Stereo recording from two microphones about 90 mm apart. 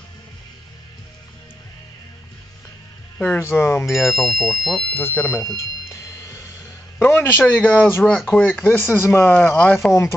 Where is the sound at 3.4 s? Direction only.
25° left (ahead or behind).